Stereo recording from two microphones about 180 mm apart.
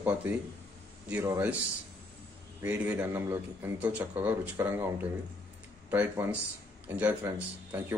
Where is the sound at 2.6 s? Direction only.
10° right (ahead or behind).